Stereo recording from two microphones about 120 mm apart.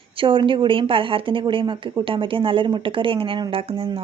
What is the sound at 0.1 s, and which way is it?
A woman's voice, 45° right (ahead or behind).